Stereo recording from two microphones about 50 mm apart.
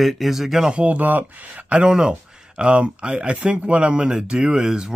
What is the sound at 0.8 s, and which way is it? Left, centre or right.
Speech, right.